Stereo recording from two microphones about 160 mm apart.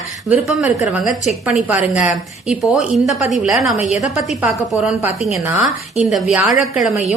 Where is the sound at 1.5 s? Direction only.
5° right (ahead or behind).